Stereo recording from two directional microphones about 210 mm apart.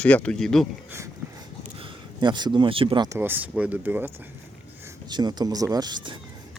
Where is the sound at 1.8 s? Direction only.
20° right (ahead or behind).